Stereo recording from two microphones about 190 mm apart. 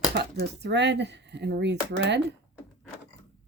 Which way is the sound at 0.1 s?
60° right (ahead or behind).